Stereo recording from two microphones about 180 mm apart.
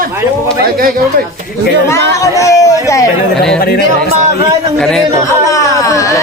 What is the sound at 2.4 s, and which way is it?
Speech, 20° left (ahead or behind).